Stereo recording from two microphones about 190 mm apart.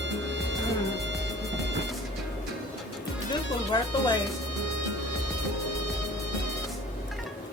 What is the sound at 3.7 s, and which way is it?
Music, 20° left (ahead or behind).